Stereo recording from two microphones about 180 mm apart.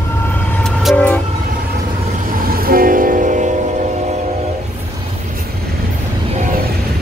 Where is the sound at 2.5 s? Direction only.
55° right (ahead or behind).